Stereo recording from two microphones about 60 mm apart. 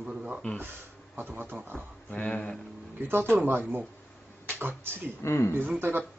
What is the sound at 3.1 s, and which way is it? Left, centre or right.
Speech, right.